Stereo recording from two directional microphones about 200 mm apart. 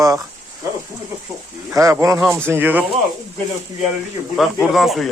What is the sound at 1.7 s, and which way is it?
Speech, 15° right (ahead or behind).